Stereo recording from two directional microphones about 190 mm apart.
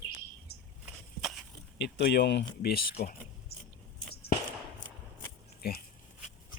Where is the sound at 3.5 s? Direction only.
55° left (ahead or behind).